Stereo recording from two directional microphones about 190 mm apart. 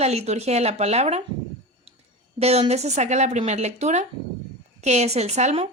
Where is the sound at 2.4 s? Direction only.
35° right (ahead or behind).